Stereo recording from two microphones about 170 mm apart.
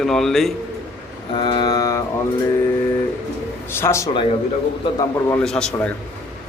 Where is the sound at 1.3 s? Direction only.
25° left (ahead or behind).